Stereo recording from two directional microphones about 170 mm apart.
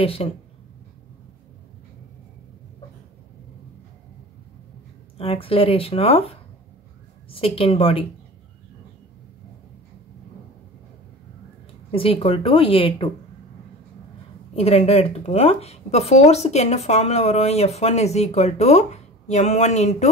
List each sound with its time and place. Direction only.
0.0 s speech: 35° left (ahead or behind)
5.1 s speech: 35° left (ahead or behind)
7.2 s speech: 30° left (ahead or behind)
11.9 s speech: 30° left (ahead or behind)
14.5 s speech: 35° left (ahead or behind)